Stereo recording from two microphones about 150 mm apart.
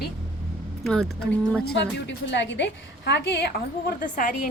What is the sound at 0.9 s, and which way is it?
Speech, 5° left (ahead or behind).